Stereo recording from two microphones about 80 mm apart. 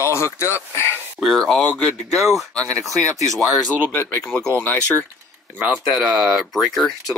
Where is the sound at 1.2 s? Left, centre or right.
Centre.